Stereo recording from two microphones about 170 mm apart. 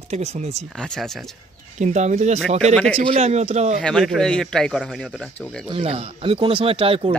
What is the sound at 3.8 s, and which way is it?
A man's voice, 5° left (ahead or behind).